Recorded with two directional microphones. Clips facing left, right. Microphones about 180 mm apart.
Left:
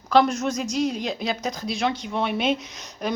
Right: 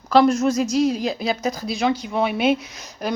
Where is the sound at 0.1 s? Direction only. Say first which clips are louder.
Right 4 dB; centre (ahead or behind).